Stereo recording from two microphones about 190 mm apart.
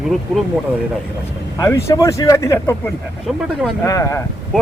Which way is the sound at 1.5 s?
15° left (ahead or behind).